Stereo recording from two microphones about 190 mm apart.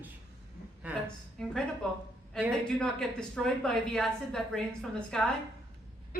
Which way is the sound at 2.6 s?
5° left (ahead or behind).